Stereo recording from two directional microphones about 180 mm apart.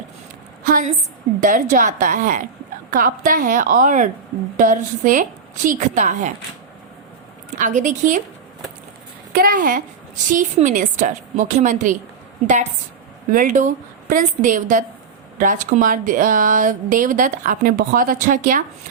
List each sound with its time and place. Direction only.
0.6 s a woman's voice: 50° right (ahead or behind)
7.6 s a woman's voice: 45° right (ahead or behind)
9.3 s a woman's voice: 55° right (ahead or behind)
13.3 s a woman's voice: 45° right (ahead or behind)